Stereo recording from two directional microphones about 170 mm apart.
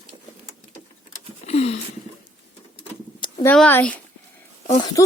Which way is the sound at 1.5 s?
40° left (ahead or behind).